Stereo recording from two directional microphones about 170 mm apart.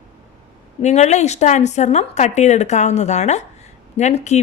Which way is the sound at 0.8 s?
40° left (ahead or behind).